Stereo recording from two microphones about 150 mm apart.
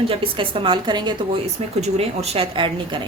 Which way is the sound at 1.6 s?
45° right (ahead or behind).